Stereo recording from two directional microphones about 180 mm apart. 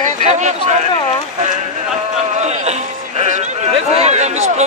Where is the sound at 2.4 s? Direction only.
40° right (ahead or behind).